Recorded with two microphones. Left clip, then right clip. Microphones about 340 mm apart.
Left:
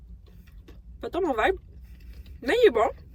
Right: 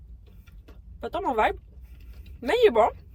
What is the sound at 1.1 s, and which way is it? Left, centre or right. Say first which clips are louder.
Speech: right 1 dB; centre.